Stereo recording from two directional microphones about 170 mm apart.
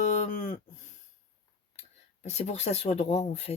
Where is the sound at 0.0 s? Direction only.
45° left (ahead or behind).